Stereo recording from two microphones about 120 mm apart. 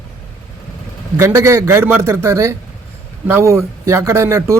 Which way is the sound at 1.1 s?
25° right (ahead or behind).